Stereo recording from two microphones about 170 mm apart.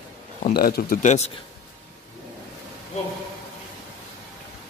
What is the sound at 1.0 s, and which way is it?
Speech, 45° left (ahead or behind).